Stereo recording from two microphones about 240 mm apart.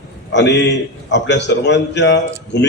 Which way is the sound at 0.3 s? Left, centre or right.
Left.